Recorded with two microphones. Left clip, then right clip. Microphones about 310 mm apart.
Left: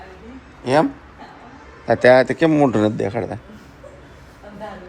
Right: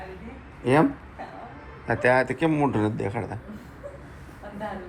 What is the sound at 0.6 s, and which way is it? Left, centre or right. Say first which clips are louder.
Speech: left 4 dB; centre.